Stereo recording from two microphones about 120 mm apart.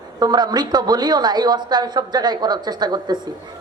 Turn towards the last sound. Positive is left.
turn(degrees=-35)  # may be behind; listen again after turning